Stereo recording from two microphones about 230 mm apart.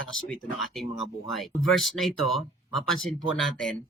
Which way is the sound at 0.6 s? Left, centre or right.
Centre.